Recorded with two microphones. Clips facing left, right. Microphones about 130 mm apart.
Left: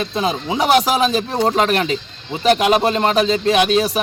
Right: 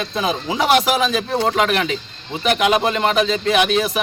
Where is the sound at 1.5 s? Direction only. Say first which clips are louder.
Left 3 dB; 35° left (ahead or behind).